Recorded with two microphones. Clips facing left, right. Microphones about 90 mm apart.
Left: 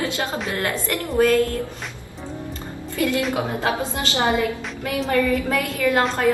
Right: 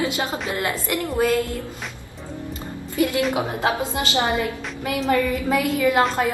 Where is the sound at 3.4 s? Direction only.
25° right (ahead or behind).